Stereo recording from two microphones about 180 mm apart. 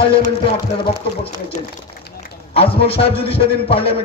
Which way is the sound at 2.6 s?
30° left (ahead or behind).